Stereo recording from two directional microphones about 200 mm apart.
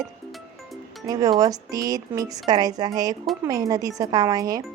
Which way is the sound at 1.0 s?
20° right (ahead or behind).